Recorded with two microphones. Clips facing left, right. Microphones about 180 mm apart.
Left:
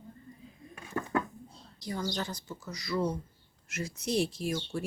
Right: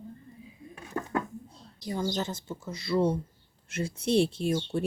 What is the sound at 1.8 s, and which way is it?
Speech, 20° right (ahead or behind).